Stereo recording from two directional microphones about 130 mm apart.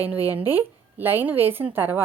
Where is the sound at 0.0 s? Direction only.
15° right (ahead or behind).